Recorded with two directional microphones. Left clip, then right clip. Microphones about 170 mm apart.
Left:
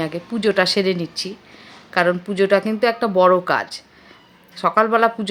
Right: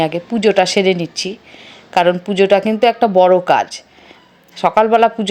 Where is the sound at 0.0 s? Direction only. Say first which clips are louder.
Right 7 dB; 15° right (ahead or behind).